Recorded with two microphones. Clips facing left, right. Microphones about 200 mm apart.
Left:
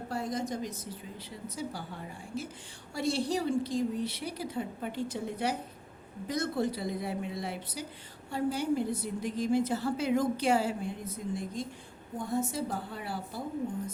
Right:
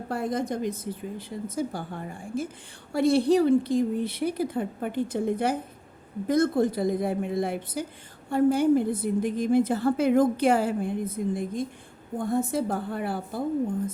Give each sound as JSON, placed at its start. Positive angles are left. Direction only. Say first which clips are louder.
{"t": 0.1, "sound": "a woman's voice", "louder": "right 6 dB", "side_deg": -55}